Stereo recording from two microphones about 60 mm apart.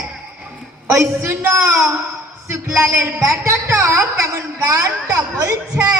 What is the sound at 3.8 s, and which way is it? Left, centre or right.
A woman's voice, right.